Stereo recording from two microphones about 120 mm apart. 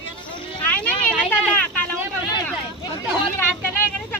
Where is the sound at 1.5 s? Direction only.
10° left (ahead or behind).